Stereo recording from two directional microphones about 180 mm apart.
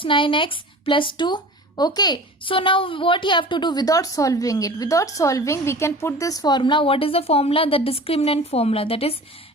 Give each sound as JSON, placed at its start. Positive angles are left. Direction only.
{"t": 0.0, "sound": "speech", "side_deg": 30}